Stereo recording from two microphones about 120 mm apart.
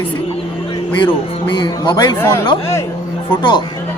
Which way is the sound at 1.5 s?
40° left (ahead or behind).